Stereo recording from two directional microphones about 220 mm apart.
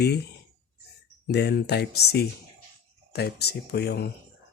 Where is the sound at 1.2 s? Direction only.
50° left (ahead or behind).